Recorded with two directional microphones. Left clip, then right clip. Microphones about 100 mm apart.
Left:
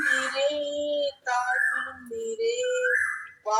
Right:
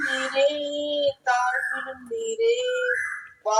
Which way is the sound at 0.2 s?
40° right (ahead or behind).